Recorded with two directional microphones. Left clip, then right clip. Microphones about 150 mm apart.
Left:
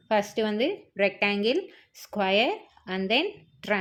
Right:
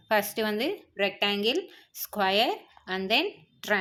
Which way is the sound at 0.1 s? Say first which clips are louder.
Left 1 dB; 35° left (ahead or behind).